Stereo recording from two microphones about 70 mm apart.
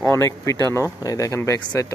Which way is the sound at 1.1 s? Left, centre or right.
Left.